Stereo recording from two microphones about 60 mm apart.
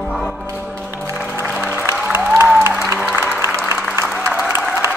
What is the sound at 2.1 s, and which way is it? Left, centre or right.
Music, right.